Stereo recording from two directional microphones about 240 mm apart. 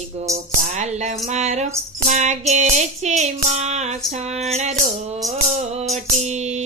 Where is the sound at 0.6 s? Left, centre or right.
Right.